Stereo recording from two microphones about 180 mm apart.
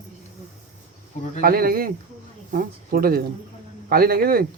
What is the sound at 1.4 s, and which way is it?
Speech, 55° right (ahead or behind).